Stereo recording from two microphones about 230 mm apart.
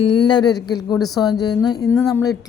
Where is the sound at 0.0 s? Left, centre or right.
Centre.